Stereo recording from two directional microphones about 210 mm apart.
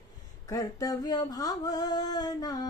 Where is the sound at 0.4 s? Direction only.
15° left (ahead or behind).